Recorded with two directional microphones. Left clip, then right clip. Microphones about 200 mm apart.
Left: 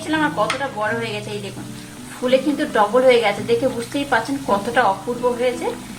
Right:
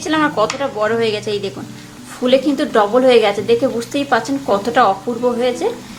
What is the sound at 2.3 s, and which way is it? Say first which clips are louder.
Speech: right 4 dB; 40° right (ahead or behind).